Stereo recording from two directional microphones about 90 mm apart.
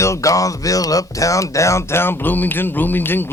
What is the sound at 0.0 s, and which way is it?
Speech, 35° left (ahead or behind).